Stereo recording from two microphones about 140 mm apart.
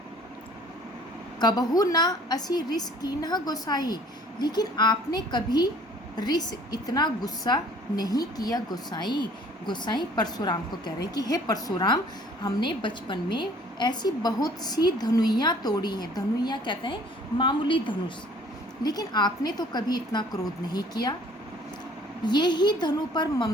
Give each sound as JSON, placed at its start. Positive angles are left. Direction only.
{"t": 1.4, "sound": "a woman's voice", "side_deg": 30}
{"t": 22.2, "sound": "a woman's voice", "side_deg": 30}